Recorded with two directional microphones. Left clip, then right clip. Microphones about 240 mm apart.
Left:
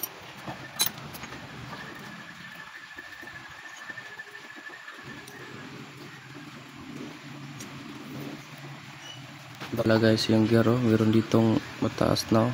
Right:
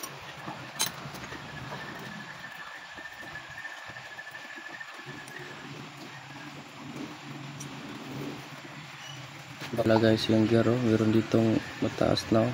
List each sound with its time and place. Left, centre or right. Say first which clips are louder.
9.8 s speech: left 1 dB; centre